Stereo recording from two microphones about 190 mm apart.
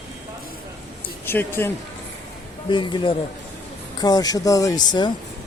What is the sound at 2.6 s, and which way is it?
Speech, 25° left (ahead or behind).